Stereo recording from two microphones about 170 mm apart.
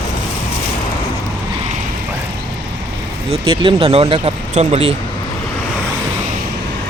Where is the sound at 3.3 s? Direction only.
30° right (ahead or behind).